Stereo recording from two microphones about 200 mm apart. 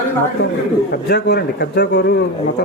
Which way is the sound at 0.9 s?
55° left (ahead or behind).